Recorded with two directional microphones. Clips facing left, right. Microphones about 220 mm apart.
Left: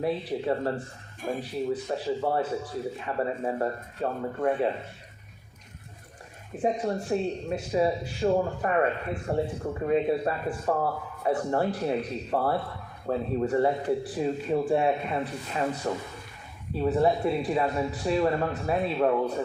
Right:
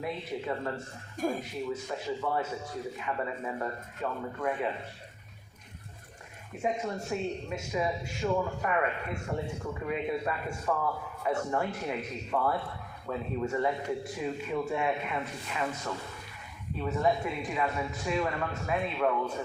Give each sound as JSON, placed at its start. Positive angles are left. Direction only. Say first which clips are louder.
{"t": 0.0, "sound": "speech", "louder": "left 7 dB", "side_deg": 35}
{"t": 6.6, "sound": "speech", "louder": "left 5 dB", "side_deg": 35}